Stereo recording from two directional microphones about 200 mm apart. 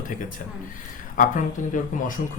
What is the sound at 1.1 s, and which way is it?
Speech, 40° left (ahead or behind).